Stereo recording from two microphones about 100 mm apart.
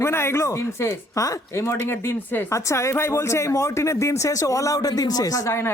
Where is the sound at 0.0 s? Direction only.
25° left (ahead or behind).